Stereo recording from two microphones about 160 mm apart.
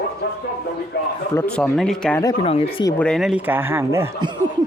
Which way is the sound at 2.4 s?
35° left (ahead or behind).